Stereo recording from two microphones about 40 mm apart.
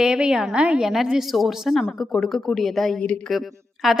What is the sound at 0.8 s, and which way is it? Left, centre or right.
A woman's voice, centre.